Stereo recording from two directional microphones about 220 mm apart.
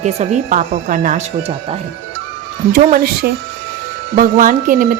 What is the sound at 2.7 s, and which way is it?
A woman's voice, 40° right (ahead or behind).